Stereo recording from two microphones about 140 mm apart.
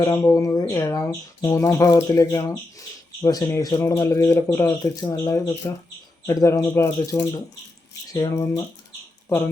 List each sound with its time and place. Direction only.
0.0 s speech: 20° left (ahead or behind)